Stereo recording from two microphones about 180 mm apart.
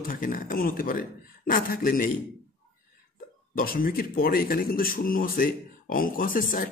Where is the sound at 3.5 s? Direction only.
55° left (ahead or behind).